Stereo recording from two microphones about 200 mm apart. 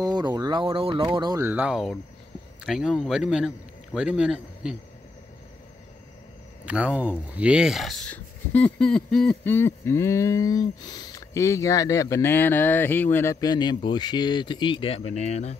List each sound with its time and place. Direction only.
0.0 s a man's voice: 20° right (ahead or behind); by 4.7 s 5° right (ahead or behind)
6.6 s speech: 5° right (ahead or behind); by 15.5 s 30° left (ahead or behind)